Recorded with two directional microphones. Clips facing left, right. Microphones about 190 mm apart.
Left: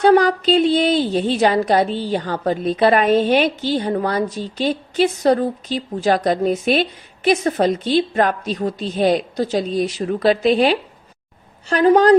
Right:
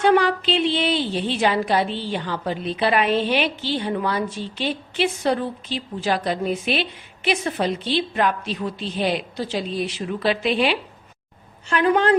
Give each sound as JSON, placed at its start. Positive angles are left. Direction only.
{"t": 0.0, "sound": "a woman's voice", "side_deg": 40}